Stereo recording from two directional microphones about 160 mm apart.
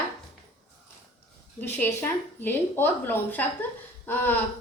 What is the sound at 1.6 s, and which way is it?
A woman's voice, 10° left (ahead or behind).